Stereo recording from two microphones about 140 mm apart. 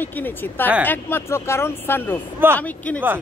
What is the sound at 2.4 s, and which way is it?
Speech, 15° right (ahead or behind).